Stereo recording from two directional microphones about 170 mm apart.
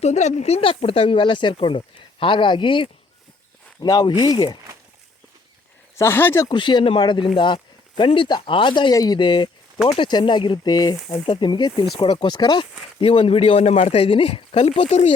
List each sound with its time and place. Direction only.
0.0 s speech: 40° left (ahead or behind); by 4.5 s 25° left (ahead or behind)
6.0 s speech: 15° left (ahead or behind)
6.5 s speech: 30° left (ahead or behind)